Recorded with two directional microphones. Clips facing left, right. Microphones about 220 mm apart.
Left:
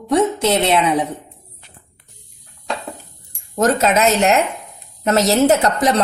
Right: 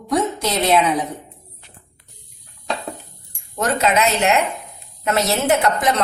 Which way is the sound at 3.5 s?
40° left (ahead or behind).